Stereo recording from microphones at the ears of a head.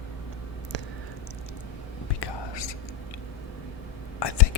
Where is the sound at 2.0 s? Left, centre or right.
Left.